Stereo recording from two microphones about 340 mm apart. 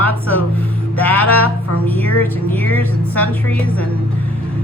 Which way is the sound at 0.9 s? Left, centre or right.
Centre.